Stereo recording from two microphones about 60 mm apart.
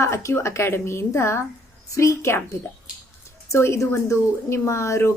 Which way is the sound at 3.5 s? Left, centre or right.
Left.